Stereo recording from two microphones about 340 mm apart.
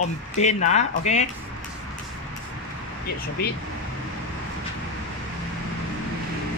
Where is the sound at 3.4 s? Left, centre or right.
Left.